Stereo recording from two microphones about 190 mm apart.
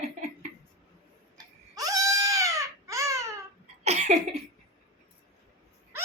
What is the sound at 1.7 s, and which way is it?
Baby cry, 20° right (ahead or behind).